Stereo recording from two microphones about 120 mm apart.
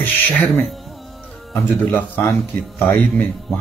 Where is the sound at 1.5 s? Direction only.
15° left (ahead or behind).